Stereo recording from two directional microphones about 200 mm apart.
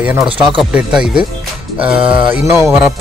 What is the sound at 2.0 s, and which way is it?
Music, 25° right (ahead or behind).